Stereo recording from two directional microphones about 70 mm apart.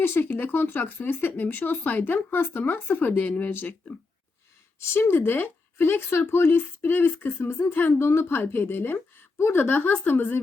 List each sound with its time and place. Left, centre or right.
0.0 s speech: left
4.8 s speech: left